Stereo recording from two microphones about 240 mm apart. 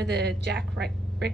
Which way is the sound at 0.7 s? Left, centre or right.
Right.